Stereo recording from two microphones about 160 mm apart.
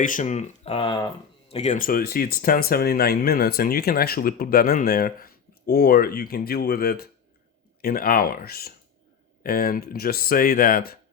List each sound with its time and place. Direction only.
0.0 s speech: 55° left (ahead or behind)